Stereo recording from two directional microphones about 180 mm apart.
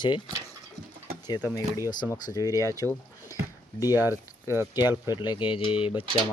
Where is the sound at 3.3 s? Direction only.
20° left (ahead or behind).